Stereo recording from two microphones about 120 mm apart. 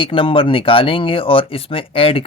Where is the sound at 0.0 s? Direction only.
45° left (ahead or behind).